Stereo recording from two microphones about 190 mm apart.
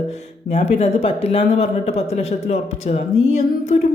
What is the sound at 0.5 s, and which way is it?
Speech, 35° left (ahead or behind).